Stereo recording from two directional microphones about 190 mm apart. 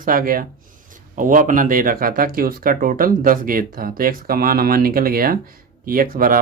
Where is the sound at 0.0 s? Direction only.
50° right (ahead or behind).